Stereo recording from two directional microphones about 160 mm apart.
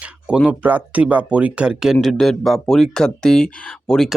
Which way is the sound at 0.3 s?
5° right (ahead or behind).